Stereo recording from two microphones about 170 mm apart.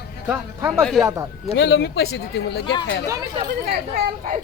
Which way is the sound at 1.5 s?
90° left.